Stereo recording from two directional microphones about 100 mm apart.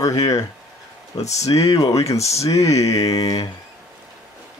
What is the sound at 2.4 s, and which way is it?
Speech, 35° left (ahead or behind).